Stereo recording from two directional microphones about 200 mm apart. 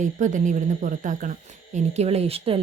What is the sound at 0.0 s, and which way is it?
Speech, 40° right (ahead or behind).